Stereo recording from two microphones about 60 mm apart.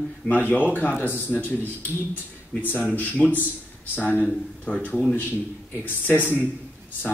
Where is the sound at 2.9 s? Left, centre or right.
Left.